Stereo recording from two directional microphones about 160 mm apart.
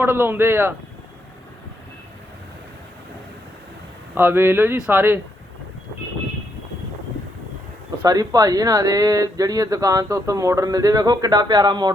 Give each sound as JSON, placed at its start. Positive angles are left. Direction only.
{"t": 0.0, "sound": "speech", "side_deg": -15}
{"t": 4.1, "sound": "speech", "side_deg": -15}
{"t": 8.0, "sound": "speech", "side_deg": -25}